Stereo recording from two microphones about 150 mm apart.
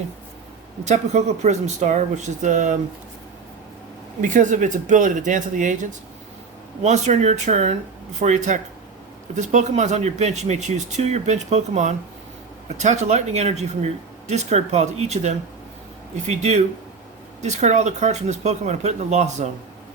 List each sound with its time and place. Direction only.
0.9 s speech: 50° right (ahead or behind)
4.2 s speech: 55° right (ahead or behind)